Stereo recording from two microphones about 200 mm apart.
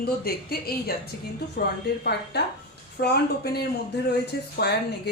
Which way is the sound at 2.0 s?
55° left (ahead or behind).